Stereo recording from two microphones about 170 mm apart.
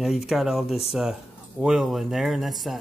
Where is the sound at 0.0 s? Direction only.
Centre (ahead or behind).